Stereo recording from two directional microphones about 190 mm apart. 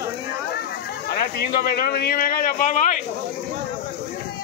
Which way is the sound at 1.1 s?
55° left (ahead or behind).